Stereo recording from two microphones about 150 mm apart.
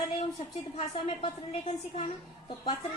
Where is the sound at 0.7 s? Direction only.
40° left (ahead or behind).